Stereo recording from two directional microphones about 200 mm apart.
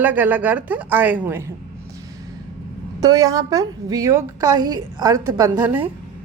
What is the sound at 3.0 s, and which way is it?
A woman's voice, 20° right (ahead or behind).